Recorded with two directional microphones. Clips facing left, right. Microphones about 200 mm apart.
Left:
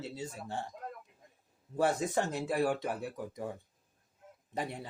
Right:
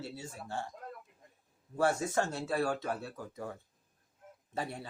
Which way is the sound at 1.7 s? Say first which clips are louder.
Even; 20° left (ahead or behind).